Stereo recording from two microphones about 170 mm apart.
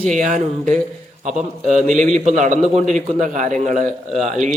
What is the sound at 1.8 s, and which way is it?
A man's voice, 45° right (ahead or behind).